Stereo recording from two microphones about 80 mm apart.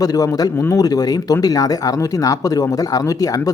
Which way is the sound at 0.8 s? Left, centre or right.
Left.